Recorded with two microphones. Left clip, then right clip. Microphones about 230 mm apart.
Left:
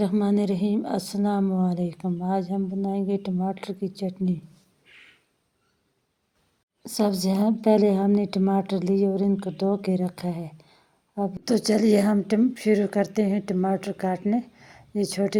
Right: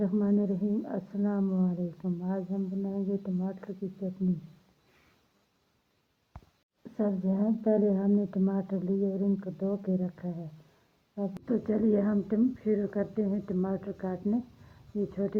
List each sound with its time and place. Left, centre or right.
0.0 s speech: left
6.9 s speech: left
11.4 s speech: left